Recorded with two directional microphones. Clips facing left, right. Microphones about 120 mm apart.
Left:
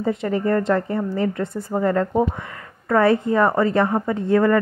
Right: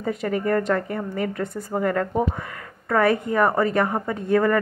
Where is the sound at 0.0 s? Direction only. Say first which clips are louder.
Left 3 dB; 25° left (ahead or behind).